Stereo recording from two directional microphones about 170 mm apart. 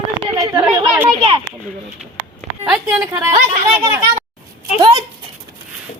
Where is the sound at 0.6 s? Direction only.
10° right (ahead or behind).